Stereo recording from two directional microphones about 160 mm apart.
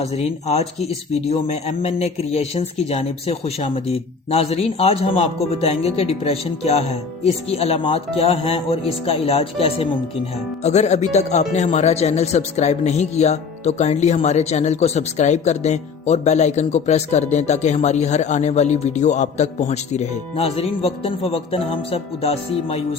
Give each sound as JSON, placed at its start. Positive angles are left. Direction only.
{"t": 0.0, "sound": "speech", "side_deg": 40}